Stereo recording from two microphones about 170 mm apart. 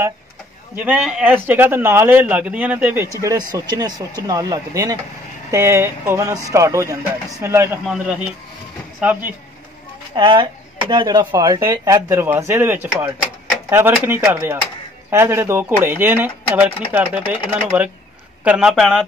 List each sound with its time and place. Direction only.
0.7 s speech: 10° right (ahead or behind)
7.8 s speech: 5° right (ahead or behind)
10.1 s speech: 25° right (ahead or behind); by 19.0 s centre (ahead or behind)